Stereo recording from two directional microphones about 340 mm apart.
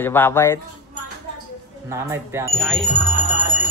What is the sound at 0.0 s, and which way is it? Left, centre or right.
Speech, centre.